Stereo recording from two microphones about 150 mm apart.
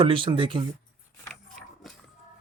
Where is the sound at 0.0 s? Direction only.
35° right (ahead or behind).